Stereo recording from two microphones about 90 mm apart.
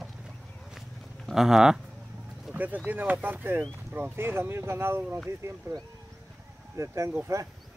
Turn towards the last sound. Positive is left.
turn(degrees=-35)  # may be behind; listen again after turning